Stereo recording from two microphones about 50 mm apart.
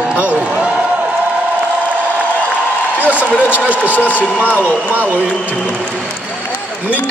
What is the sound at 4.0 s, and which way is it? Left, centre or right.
Speech, left.